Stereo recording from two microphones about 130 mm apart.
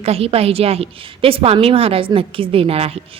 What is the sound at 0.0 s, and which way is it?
A woman's voice, 50° right (ahead or behind).